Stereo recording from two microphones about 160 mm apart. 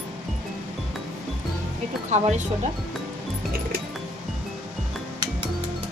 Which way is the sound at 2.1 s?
45° right (ahead or behind).